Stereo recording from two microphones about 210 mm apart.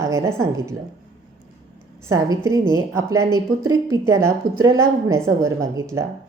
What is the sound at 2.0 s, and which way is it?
A woman's voice, 15° right (ahead or behind).